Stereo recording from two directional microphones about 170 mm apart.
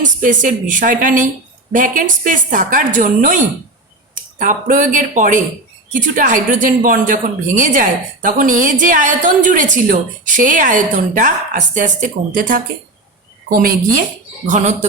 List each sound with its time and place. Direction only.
0.2 s a woman's voice: 50° right (ahead or behind)